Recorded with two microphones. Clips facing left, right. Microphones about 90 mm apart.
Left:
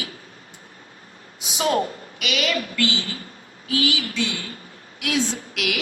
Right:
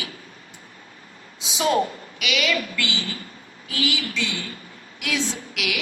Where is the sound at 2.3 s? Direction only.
40° left (ahead or behind).